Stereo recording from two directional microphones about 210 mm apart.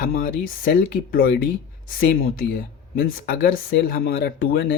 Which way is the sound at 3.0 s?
45° left (ahead or behind).